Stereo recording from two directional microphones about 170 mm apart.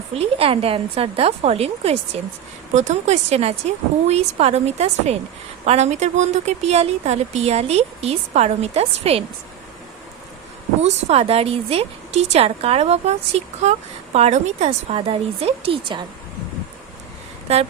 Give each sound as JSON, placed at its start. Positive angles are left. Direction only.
{"t": 0.1, "sound": "a woman's voice", "side_deg": -35}
{"t": 10.8, "sound": "a woman's voice", "side_deg": -35}
{"t": 17.5, "sound": "a woman's voice", "side_deg": -40}